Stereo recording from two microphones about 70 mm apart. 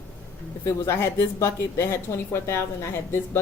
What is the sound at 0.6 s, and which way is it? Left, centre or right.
A woman's voice, left.